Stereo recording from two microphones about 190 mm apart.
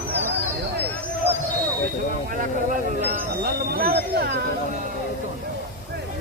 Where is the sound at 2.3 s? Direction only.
45° right (ahead or behind).